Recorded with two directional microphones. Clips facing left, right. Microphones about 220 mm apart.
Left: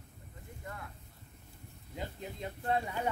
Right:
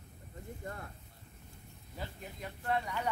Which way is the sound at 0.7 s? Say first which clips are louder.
Right 1 dB; 40° right (ahead or behind).